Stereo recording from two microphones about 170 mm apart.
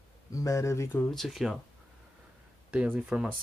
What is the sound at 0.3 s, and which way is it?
Speech, 20° left (ahead or behind).